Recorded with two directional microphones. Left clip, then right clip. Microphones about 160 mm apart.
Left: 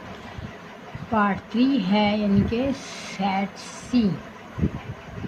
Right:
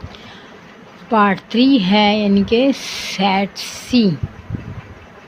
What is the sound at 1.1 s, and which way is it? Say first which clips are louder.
Speech: right 9 dB; 65° right (ahead or behind).